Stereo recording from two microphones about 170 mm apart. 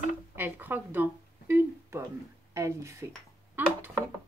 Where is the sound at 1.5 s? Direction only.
15° right (ahead or behind).